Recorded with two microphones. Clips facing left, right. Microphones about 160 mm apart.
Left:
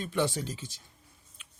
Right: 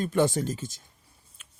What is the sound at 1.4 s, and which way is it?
Tick-tock, 45° right (ahead or behind).